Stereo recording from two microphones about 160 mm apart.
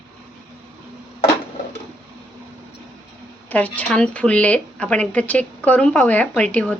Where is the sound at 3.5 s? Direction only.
10° left (ahead or behind).